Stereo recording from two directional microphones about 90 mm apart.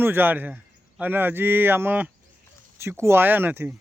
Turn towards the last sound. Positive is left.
turn(degrees=-25)  # may be behind; listen again after turning